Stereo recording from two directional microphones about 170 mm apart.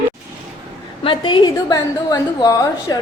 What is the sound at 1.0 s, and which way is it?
A woman's voice, 30° left (ahead or behind).